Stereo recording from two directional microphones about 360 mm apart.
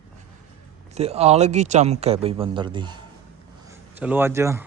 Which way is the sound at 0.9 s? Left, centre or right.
Centre.